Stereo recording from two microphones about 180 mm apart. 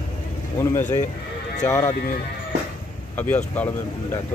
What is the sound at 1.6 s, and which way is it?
Speech, 15° left (ahead or behind).